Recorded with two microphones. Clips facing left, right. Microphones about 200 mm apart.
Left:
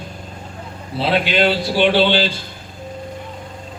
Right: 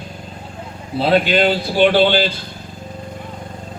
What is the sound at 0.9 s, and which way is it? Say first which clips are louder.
A man's voice: right 3 dB; 45° right (ahead or behind).